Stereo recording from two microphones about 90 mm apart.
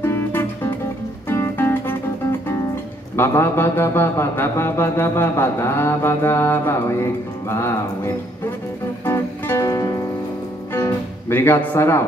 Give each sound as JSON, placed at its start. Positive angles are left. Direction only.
{"t": 0.0, "sound": "music", "side_deg": 25}